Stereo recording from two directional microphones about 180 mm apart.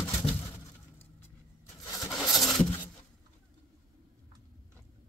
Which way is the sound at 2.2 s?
20° left (ahead or behind).